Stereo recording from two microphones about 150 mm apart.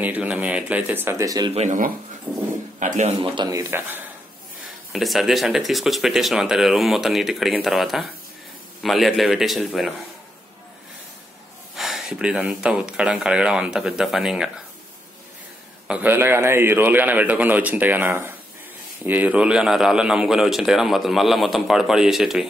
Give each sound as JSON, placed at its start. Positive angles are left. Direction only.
{"t": 0.0, "sound": "a man's voice", "side_deg": -10}
{"t": 1.5, "sound": "speech", "side_deg": -50}
{"t": 3.2, "sound": "speech", "side_deg": -25}
{"t": 4.9, "sound": "a man's voice", "side_deg": 0}
{"t": 11.7, "sound": "a man's voice", "side_deg": 0}
{"t": 15.9, "sound": "a man's voice", "side_deg": -10}